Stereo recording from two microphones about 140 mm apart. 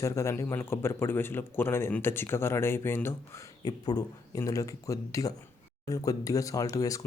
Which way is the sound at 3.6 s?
30° left (ahead or behind).